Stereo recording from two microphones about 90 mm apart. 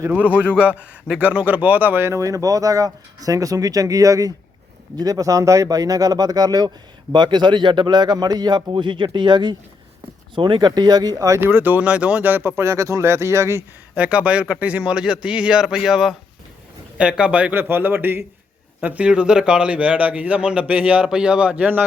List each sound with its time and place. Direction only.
0.1 s speech: 15° right (ahead or behind); by 6.7 s 45° right (ahead or behind)
7.1 s a man's voice: 55° right (ahead or behind); by 11.4 s 40° right (ahead or behind)
11.4 s speech: 20° right (ahead or behind)
13.9 s a man's voice: 15° right (ahead or behind)